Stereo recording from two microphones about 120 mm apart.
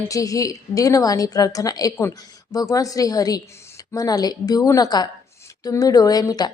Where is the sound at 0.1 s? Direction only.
30° left (ahead or behind).